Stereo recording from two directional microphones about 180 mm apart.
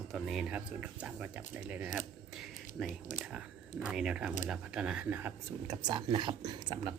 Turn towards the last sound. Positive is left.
turn(degrees=-25)  # may be behind; listen again after turning